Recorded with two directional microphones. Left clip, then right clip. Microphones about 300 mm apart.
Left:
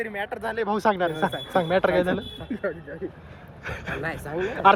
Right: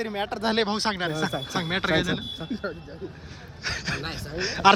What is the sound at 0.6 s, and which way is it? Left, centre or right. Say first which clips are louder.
Speech: left 4 dB; centre.